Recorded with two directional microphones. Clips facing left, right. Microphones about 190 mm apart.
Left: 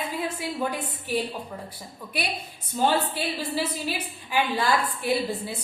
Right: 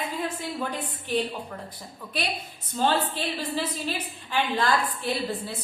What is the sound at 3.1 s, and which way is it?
A woman's voice, 10° left (ahead or behind).